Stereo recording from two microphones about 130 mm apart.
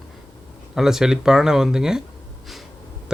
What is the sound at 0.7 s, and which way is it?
Speech, 5° right (ahead or behind).